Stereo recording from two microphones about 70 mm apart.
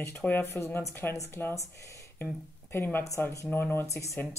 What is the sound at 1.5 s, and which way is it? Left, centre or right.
Speech, left.